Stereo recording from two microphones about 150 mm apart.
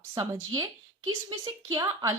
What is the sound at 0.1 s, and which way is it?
Speech, 25° right (ahead or behind).